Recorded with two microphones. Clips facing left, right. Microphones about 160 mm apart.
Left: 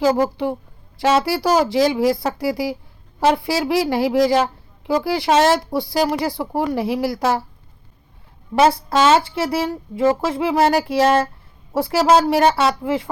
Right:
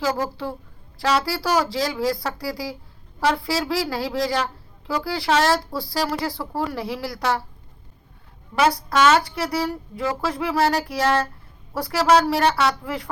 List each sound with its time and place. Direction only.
0.0 s speech: 25° left (ahead or behind)
8.5 s speech: 25° left (ahead or behind)